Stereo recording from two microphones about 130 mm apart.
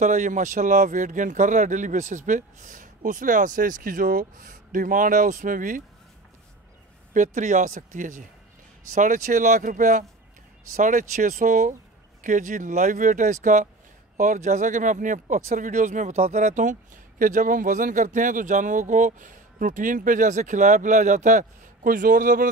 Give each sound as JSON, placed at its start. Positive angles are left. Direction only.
{"t": 0.0, "sound": "speech", "side_deg": -75}
{"t": 7.2, "sound": "speech", "side_deg": -80}
{"t": 10.8, "sound": "speech", "side_deg": -80}